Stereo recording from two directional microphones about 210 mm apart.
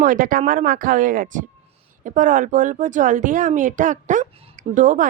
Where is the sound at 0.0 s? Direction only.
40° right (ahead or behind).